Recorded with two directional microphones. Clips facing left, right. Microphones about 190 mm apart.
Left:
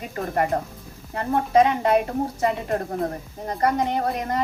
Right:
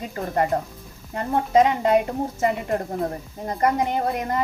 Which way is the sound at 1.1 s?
20° right (ahead or behind).